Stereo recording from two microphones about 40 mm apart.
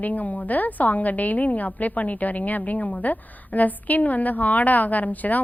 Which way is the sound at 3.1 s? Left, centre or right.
Left.